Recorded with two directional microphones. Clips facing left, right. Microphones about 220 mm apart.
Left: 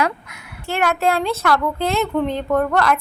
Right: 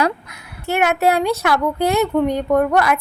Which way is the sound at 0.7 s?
15° right (ahead or behind).